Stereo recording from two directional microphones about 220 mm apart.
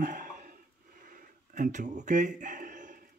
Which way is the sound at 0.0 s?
35° right (ahead or behind).